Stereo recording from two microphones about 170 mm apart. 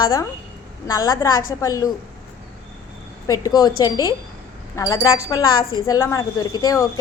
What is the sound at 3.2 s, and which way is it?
A woman's voice, 20° left (ahead or behind).